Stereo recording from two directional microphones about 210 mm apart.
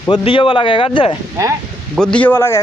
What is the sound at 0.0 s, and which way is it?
Speech, 20° left (ahead or behind).